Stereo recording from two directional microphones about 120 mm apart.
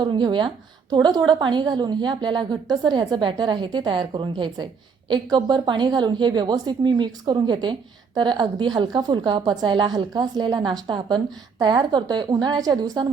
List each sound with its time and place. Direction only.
0.0 s a woman's voice: 40° right (ahead or behind)